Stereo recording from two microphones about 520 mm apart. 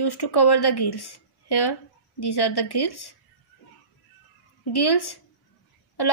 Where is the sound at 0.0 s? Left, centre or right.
Left.